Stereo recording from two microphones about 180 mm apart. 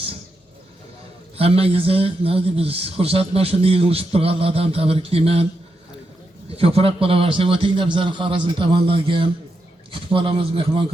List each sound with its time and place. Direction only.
1.4 s a man's voice: 35° right (ahead or behind)
6.5 s a man's voice: 35° right (ahead or behind)